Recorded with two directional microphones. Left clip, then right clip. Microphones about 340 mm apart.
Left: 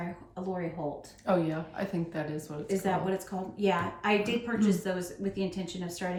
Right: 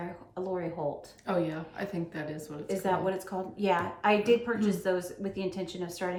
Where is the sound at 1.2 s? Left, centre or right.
Centre.